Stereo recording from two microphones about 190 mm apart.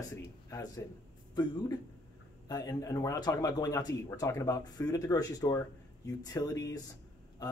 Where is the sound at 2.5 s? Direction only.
20° left (ahead or behind).